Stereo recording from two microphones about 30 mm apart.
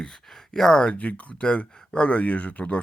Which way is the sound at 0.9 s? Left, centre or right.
Left.